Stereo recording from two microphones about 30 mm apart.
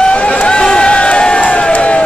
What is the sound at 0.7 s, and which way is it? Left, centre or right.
Crowd, left.